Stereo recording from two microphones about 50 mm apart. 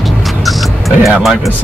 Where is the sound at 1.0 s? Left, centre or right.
Centre.